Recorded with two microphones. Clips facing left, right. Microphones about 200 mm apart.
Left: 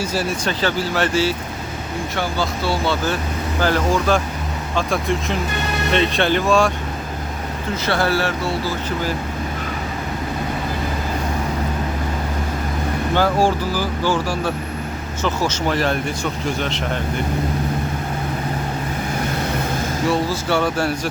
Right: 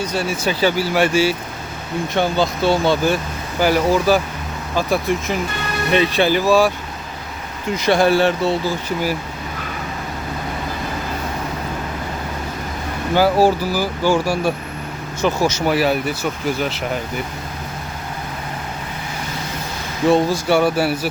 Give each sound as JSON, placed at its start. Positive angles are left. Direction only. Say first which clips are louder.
{"t": 0.0, "sound": "speech", "louder": "right 1 dB", "side_deg": 5}
{"t": 0.6, "sound": "speech", "louder": "right 4 dB", "side_deg": -10}
{"t": 7.8, "sound": "speech", "louder": "right 6 dB", "side_deg": -15}
{"t": 13.1, "sound": "speech", "louder": "right 4 dB", "side_deg": -10}
{"t": 20.1, "sound": "speech", "louder": "right 6 dB", "side_deg": -10}